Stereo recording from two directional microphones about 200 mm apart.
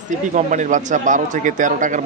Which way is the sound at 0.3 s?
40° right (ahead or behind).